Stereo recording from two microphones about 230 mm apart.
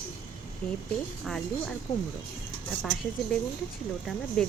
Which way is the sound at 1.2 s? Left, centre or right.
Centre.